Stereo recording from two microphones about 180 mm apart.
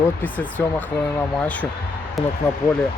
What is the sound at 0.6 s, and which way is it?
Speech, 10° left (ahead or behind).